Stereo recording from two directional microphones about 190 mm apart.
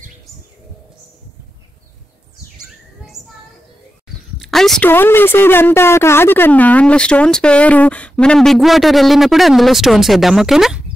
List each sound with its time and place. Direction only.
4.4 s a woman's voice: centre (ahead or behind)